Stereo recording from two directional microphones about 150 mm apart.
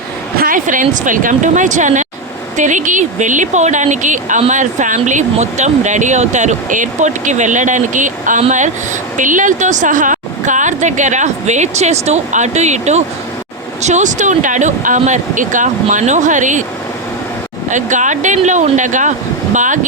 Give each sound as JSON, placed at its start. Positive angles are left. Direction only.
{"t": 0.3, "sound": "speech", "side_deg": -65}
{"t": 17.7, "sound": "speech", "side_deg": -55}